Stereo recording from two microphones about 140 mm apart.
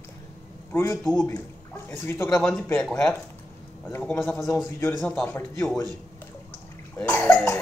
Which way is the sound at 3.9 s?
10° left (ahead or behind).